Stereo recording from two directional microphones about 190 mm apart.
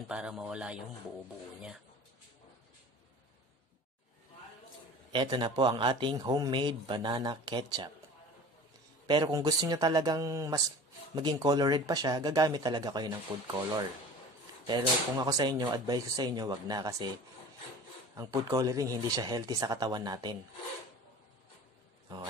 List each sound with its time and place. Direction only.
0.1 s a man's voice: 5° right (ahead or behind)
5.1 s speech: 25° right (ahead or behind)
9.0 s speech: 20° right (ahead or behind)
18.1 s speech: 15° right (ahead or behind)